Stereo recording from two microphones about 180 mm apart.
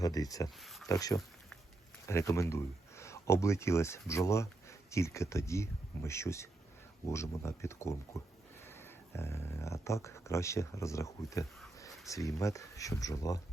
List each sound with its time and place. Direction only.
0.0 s speech: 20° left (ahead or behind)
0.6 s a sound: centre (ahead or behind)
0.9 s speech: 20° left (ahead or behind)